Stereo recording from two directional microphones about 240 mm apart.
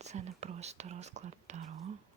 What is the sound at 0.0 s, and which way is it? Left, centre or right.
Speech, right.